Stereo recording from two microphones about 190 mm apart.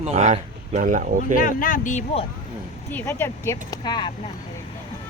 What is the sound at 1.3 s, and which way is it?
Speech, 45° left (ahead or behind).